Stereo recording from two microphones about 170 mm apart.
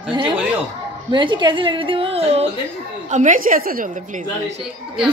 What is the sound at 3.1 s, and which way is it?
Speech, 50° right (ahead or behind).